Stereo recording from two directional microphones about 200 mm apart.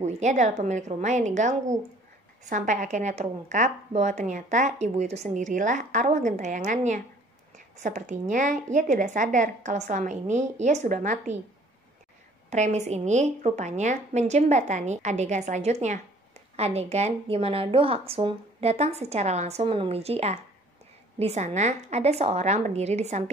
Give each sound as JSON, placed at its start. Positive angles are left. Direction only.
{"t": 0.0, "sound": "a woman's voice", "side_deg": -35}
{"t": 12.4, "sound": "a woman's voice", "side_deg": -35}